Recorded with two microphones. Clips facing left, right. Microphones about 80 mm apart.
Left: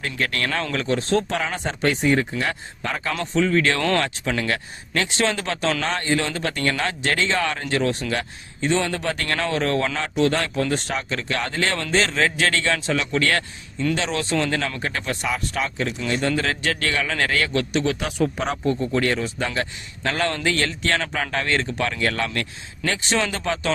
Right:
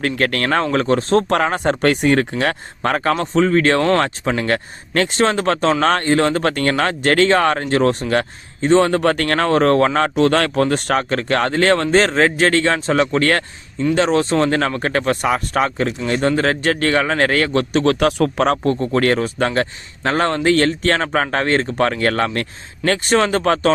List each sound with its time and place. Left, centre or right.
0.0 s speech: right
1.7 s speech: right
3.2 s a man's voice: right
17.8 s speech: right
18.8 s speech: right
20.0 s a man's voice: right
22.9 s speech: right